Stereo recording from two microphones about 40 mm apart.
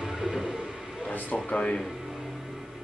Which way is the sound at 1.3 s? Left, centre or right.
Left.